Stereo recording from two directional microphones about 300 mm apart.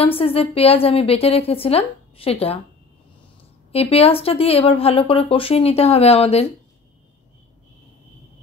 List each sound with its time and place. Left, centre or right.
0.0 s speech: centre
3.7 s speech: centre